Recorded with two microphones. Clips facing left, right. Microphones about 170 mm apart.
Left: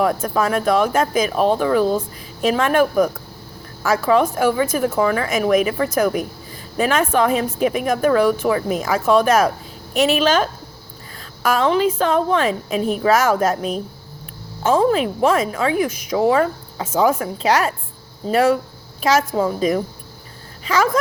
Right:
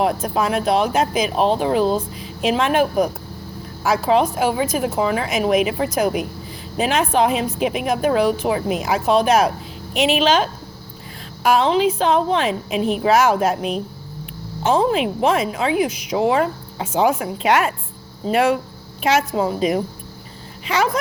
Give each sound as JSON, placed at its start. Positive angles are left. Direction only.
{"t": 0.0, "sound": "a woman's voice", "side_deg": 45}